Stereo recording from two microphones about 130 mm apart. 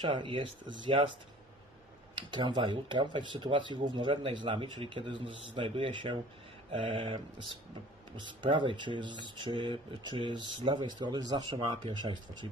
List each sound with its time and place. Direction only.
0.0 s speech: 40° right (ahead or behind)
2.1 s speech: 35° right (ahead or behind)
6.7 s mantra: 45° right (ahead or behind)
8.3 s speech: 40° right (ahead or behind)